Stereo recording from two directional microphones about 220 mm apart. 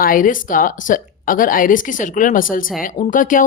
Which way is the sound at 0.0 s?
40° left (ahead or behind).